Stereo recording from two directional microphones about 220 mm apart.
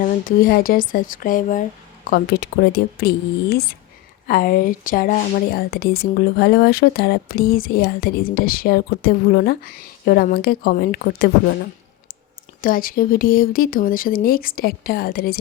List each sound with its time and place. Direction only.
0.0 s a woman's voice: 40° left (ahead or behind)
4.3 s a woman's voice: 40° left (ahead or behind)
12.6 s speech: 40° left (ahead or behind)